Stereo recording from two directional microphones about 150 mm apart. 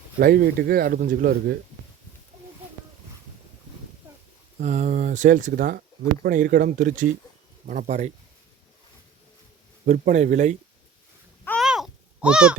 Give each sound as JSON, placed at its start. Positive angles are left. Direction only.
{"t": 0.2, "sound": "speech", "side_deg": -90}
{"t": 4.6, "sound": "speech", "side_deg": -55}
{"t": 9.8, "sound": "speech", "side_deg": -55}
{"t": 11.6, "sound": "a sound", "side_deg": -5}